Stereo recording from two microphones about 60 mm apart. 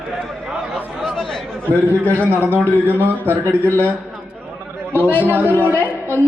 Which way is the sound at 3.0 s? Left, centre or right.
Right.